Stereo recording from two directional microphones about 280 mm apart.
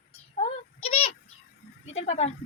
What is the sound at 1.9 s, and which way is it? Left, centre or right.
Speech, left.